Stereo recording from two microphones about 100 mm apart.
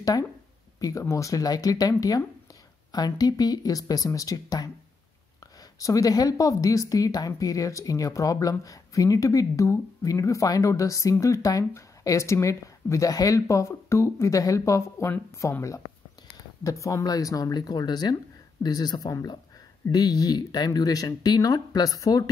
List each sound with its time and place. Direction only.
0.0 s a sound: 40° left (ahead or behind)
0.7 s speech: 35° left (ahead or behind)
5.8 s speech: 35° left (ahead or behind)
16.6 s speech: 30° left (ahead or behind)